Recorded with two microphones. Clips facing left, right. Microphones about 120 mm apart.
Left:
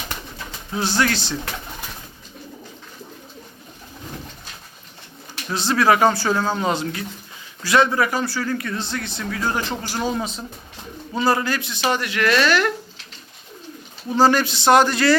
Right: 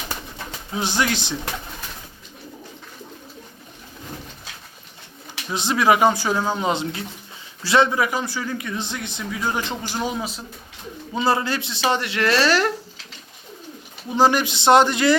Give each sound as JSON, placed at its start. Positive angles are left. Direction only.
{"t": 0.8, "sound": "speech", "side_deg": -15}
{"t": 5.5, "sound": "speech", "side_deg": -15}
{"t": 11.1, "sound": "speech", "side_deg": -25}
{"t": 14.1, "sound": "speech", "side_deg": -15}